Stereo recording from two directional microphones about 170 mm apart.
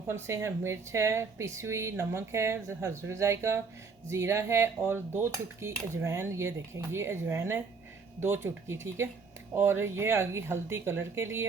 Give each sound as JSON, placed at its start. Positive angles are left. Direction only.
{"t": 0.1, "sound": "speech", "side_deg": -15}